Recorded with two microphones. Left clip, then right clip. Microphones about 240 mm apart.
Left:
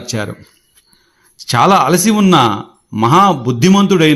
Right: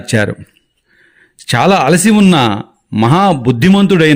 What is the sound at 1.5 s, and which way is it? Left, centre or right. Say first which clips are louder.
A man's voice: even; right.